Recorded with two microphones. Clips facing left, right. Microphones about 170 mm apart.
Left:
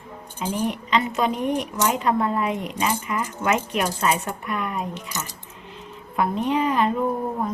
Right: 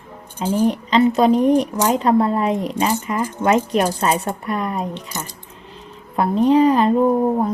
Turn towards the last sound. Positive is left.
turn(degrees=-35)  # may be behind; listen again after turning